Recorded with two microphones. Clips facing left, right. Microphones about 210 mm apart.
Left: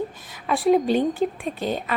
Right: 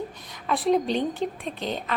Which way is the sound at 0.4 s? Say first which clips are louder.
Left 4 dB; centre (ahead or behind).